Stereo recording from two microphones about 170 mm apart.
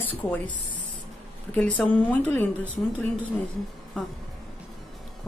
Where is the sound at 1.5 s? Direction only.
5° left (ahead or behind).